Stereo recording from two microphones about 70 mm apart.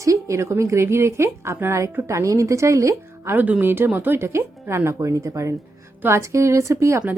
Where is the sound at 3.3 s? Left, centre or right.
Right.